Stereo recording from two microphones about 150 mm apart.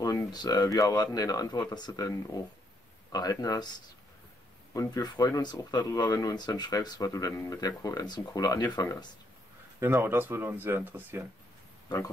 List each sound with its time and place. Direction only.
0.0 s speech: 25° left (ahead or behind)
9.8 s speech: 15° right (ahead or behind)